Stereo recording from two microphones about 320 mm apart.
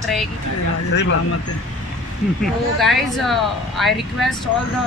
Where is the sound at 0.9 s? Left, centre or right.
Left.